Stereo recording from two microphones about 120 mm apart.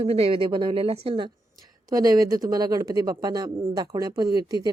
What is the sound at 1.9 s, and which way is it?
A woman's voice, 35° right (ahead or behind).